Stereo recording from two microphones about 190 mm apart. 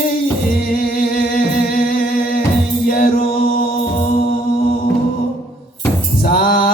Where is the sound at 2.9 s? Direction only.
50° left (ahead or behind).